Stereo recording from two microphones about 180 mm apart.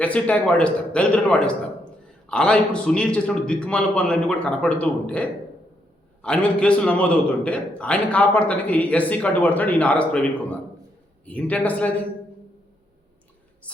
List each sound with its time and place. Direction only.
0.0 s a man's voice: 5° left (ahead or behind)